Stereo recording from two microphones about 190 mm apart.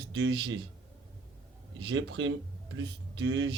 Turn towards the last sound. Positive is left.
turn(degrees=-70)  # may be behind; listen again after turning